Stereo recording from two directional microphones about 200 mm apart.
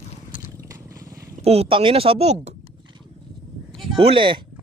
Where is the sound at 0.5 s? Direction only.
15° right (ahead or behind).